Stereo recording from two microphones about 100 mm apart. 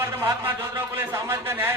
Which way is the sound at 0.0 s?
25° right (ahead or behind).